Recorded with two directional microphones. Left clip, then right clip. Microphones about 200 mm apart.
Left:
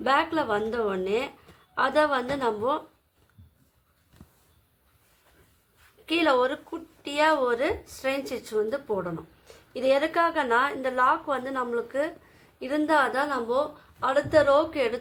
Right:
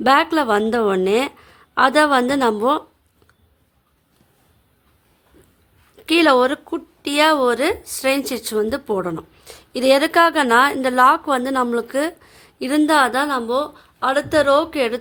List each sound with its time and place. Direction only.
0.0 s a woman's voice: 55° right (ahead or behind)
6.1 s a woman's voice: 55° right (ahead or behind)